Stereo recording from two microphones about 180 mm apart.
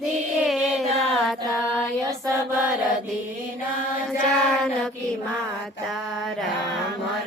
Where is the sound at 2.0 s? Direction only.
20° right (ahead or behind).